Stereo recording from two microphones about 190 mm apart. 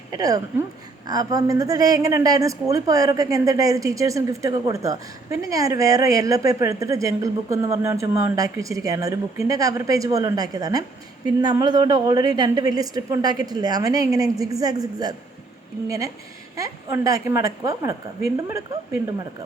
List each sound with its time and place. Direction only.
0.1 s a woman's voice: 20° right (ahead or behind)